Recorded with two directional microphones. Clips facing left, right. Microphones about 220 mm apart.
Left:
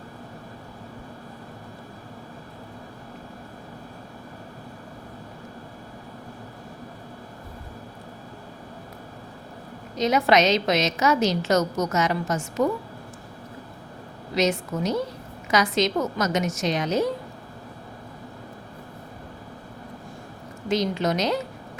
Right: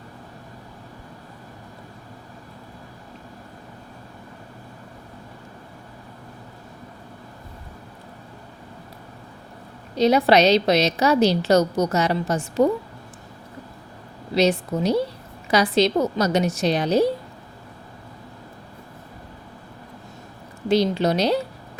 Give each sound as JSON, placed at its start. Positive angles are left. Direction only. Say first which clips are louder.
{"t": 9.9, "sound": "a woman's voice", "louder": "right 4 dB", "side_deg": -35}
{"t": 14.3, "sound": "a woman's voice", "louder": "right 4 dB", "side_deg": -35}
{"t": 20.7, "sound": "a woman's voice", "louder": "right 4 dB", "side_deg": -30}